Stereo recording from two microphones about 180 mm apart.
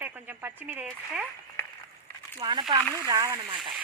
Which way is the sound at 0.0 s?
10° right (ahead or behind).